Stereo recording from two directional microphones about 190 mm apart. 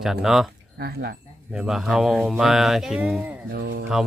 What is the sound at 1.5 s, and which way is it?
Speech, 5° right (ahead or behind).